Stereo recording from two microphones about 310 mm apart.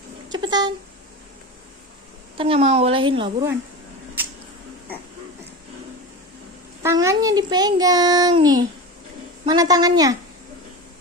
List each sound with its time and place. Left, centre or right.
0.3 s a sound: centre
2.3 s a child's voice: centre
6.8 s a child's voice: centre